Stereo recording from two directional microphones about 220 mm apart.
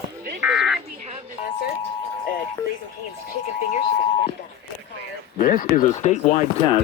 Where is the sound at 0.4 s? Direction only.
Centre (ahead or behind).